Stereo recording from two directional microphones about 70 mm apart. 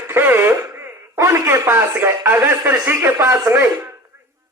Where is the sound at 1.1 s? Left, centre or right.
Right.